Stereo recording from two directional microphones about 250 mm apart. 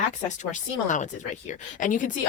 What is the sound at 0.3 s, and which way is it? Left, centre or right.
A woman's voice, left.